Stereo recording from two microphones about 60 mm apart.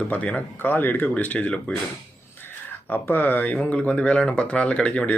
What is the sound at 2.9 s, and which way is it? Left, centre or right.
Speech, left.